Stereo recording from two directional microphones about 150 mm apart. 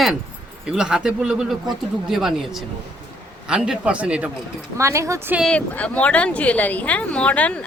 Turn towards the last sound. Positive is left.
turn(degrees=10)  # may be behind; listen again after turning